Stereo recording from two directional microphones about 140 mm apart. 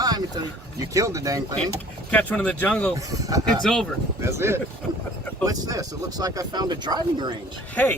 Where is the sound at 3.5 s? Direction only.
5° left (ahead or behind).